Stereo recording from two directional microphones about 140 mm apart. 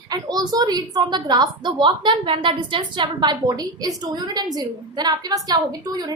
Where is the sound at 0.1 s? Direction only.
25° right (ahead or behind).